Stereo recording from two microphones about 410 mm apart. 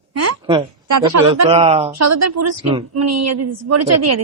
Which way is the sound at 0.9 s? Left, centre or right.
Right.